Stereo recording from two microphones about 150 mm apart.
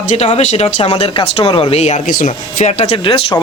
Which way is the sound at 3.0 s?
35° left (ahead or behind).